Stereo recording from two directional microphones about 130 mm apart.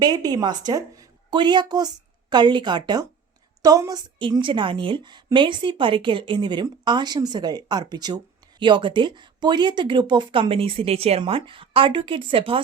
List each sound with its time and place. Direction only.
0.0 s a woman's voice: 30° right (ahead or behind)
4.2 s a woman's voice: 40° right (ahead or behind)